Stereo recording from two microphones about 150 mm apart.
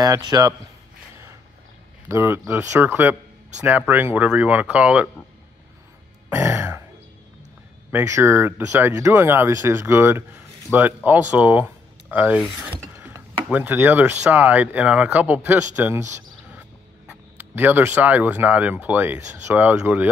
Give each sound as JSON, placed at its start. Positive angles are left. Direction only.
{"t": 0.0, "sound": "speech", "side_deg": -25}
{"t": 2.0, "sound": "speech", "side_deg": -15}
{"t": 6.3, "sound": "throat clearing", "side_deg": -15}
{"t": 7.9, "sound": "speech", "side_deg": -15}